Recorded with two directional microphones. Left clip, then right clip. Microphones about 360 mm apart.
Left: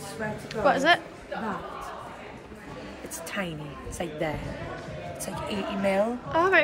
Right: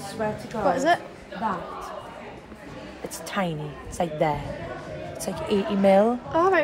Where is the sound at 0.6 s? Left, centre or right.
Centre.